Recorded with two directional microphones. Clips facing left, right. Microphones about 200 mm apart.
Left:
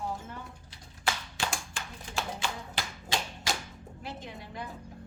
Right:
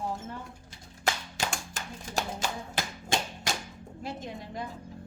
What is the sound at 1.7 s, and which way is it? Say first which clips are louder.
Music: right 3 dB; 40° right (ahead or behind).